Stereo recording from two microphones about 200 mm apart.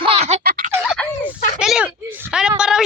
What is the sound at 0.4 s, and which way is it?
Fowl, 45° right (ahead or behind).